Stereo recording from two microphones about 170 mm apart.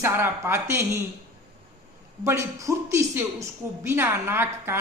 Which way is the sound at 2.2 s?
15° right (ahead or behind).